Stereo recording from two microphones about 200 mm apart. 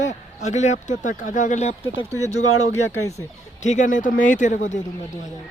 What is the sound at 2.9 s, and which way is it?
Speech, 15° left (ahead or behind).